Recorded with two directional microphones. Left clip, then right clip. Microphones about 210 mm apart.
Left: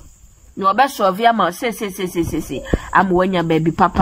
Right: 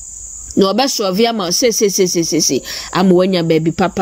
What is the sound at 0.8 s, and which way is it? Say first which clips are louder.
Speech: even; 15° right (ahead or behind).